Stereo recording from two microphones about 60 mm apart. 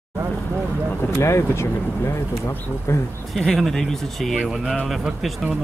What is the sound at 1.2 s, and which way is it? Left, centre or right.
Speech, left.